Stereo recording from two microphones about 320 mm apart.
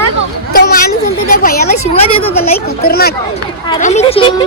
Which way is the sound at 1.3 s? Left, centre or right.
Left.